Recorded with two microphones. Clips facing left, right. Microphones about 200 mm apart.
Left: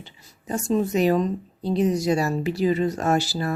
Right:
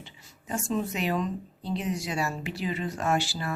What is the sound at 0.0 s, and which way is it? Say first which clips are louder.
Speech: left 4 dB; 35° left (ahead or behind).